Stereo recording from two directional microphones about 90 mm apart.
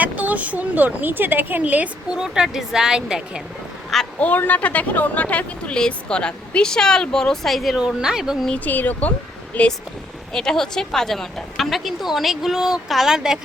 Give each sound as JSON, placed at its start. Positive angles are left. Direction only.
{"t": 0.0, "sound": "a woman's voice", "side_deg": -15}
{"t": 4.2, "sound": "speech", "side_deg": 15}
{"t": 8.4, "sound": "a woman's voice", "side_deg": 15}